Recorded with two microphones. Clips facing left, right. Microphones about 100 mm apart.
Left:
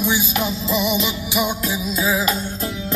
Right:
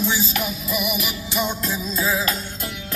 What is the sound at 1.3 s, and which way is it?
Music, 10° left (ahead or behind).